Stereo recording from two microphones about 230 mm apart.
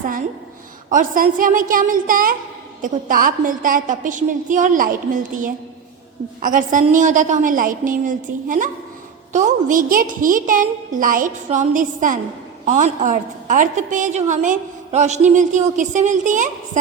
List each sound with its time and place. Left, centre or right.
0.9 s a woman's voice: right